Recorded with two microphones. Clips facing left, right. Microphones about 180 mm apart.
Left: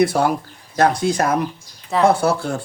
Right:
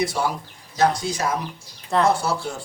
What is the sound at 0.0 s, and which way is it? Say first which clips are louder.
Speech: left 7 dB; 55° left (ahead or behind).